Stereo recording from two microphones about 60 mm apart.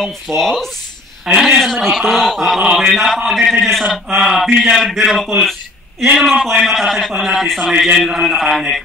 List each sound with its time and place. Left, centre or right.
0.4 s speech: centre
1.3 s speech: centre
1.6 s speech: centre
5.4 s a sound: centre
6.1 s speech: centre